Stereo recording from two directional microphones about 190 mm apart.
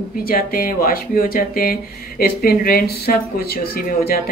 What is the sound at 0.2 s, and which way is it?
Speech, 50° left (ahead or behind).